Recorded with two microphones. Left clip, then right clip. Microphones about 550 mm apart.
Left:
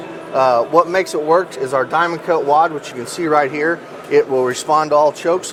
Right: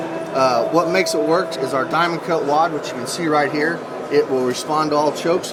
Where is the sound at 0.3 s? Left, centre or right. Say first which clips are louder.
Left 4 dB; left.